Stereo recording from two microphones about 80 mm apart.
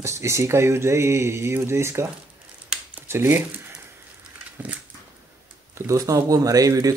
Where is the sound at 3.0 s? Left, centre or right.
Right.